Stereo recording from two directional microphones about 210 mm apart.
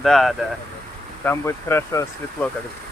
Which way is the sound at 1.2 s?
10° left (ahead or behind).